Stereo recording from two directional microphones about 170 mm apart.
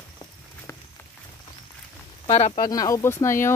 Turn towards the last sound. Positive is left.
turn(degrees=15)  # may be behind; listen again after turning